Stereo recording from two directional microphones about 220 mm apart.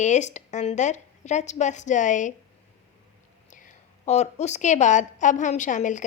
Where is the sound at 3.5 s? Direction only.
35° left (ahead or behind).